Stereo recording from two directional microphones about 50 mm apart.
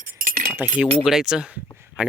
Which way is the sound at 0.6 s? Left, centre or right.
Right.